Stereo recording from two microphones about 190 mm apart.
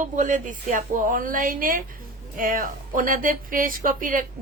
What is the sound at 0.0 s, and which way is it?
Speech, 40° right (ahead or behind).